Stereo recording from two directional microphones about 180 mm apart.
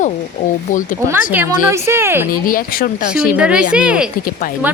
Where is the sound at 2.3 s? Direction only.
50° left (ahead or behind).